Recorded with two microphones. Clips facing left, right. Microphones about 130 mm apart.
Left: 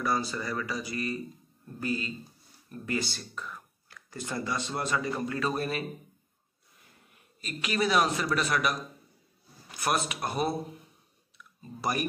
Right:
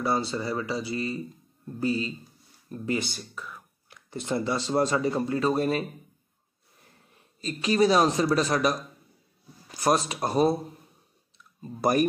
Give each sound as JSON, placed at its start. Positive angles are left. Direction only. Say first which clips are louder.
{"t": 0.0, "sound": "speech", "louder": "right 3 dB", "side_deg": -25}
{"t": 3.2, "sound": "speech", "louder": "even", "side_deg": -5}
{"t": 3.9, "sound": "speech", "louder": "right 6 dB", "side_deg": -25}
{"t": 7.4, "sound": "speech", "louder": "right 7 dB", "side_deg": -30}
{"t": 11.8, "sound": "speech", "louder": "right 8 dB", "side_deg": -45}